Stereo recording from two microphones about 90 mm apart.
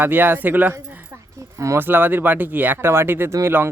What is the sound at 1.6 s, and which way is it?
Speech, 35° right (ahead or behind).